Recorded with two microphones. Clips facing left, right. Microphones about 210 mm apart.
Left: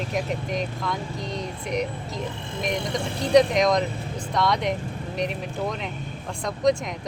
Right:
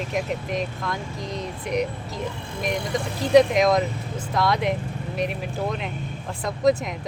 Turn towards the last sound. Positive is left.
turn(degrees=-5)  # may be behind; listen again after turning